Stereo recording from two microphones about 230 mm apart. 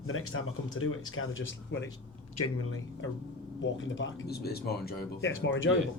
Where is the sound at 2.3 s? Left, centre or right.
Left.